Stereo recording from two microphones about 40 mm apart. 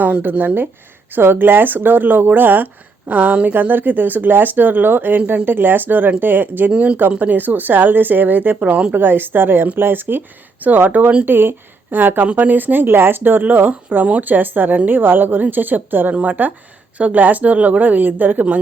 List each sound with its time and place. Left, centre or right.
0.2 s speech: right
6.7 s speech: right
7.2 s speech: right
11.3 s speech: right
14.0 s speech: right
16.1 s speech: right